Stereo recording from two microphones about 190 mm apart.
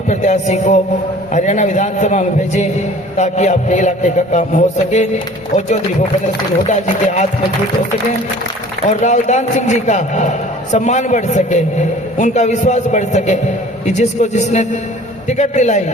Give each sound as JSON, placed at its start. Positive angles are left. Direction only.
{"t": 0.1, "sound": "a man's voice", "side_deg": 40}
{"t": 8.9, "sound": "a man's voice", "side_deg": 40}